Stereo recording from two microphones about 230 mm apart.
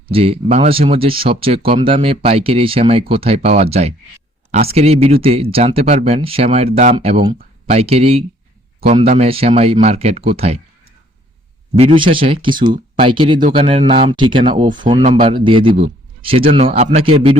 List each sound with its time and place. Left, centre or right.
0.1 s speech: right
11.8 s speech: right